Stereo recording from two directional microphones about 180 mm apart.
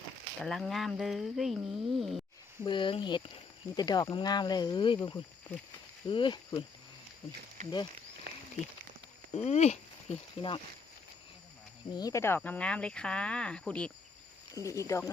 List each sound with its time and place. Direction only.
0.3 s speech: centre (ahead or behind)
2.6 s speech: 25° left (ahead or behind)
8.3 s a sound: 65° right (ahead or behind)
9.3 s speech: 35° left (ahead or behind)
11.9 s speech: 20° left (ahead or behind); by 13.9 s 5° left (ahead or behind)
14.5 s speech: 20° right (ahead or behind)
14.8 s speech: 15° left (ahead or behind)